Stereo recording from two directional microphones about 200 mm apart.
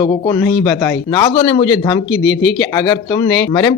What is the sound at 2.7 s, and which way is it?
Speech, 20° left (ahead or behind).